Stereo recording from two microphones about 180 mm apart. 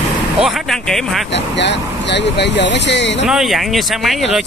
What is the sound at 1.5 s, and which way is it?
Speech, 75° left (ahead or behind).